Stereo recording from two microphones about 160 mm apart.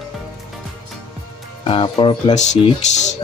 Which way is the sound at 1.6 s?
35° left (ahead or behind).